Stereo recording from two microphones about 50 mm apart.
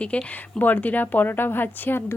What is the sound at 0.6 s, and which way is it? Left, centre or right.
A woman's voice, left.